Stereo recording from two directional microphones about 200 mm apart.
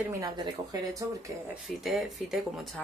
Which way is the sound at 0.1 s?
15° right (ahead or behind).